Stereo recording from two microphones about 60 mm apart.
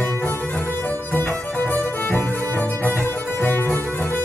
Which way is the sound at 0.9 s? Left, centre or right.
Left.